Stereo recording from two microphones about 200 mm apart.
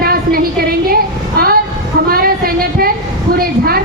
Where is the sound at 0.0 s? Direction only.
50° right (ahead or behind).